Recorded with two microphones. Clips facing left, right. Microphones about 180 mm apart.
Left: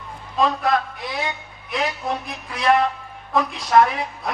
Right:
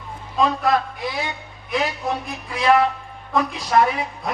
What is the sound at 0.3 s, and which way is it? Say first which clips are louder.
Speech: right 1 dB; centre (ahead or behind).